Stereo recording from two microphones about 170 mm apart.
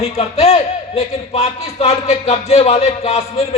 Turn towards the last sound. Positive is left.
turn(degrees=35)  # may be behind; listen again after turning